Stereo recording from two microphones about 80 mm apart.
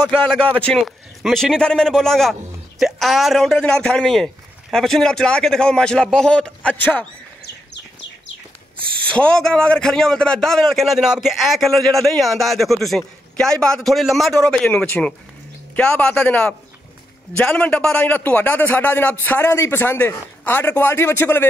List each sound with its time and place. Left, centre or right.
0.0 s a man's voice: centre
9.1 s a man's voice: centre
14.5 s a man's voice: centre